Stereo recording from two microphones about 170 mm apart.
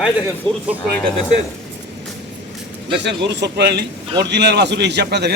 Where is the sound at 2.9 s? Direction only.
90° right.